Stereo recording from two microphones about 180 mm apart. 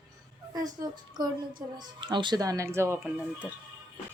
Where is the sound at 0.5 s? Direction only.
20° right (ahead or behind).